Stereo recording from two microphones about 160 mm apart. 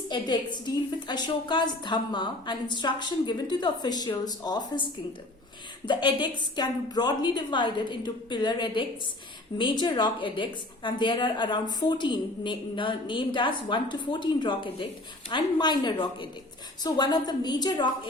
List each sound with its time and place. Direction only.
0.1 s a woman's voice: 25° left (ahead or behind)